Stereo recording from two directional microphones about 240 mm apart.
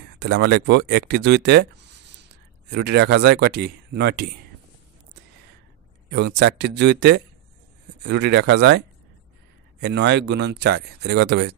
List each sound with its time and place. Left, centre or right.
0.2 s speech: right
2.7 s speech: right
6.0 s speech: right